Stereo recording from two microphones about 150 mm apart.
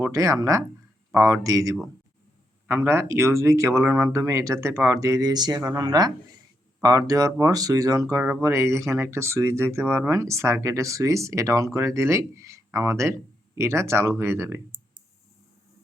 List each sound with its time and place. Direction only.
0.0 s speech: 20° right (ahead or behind)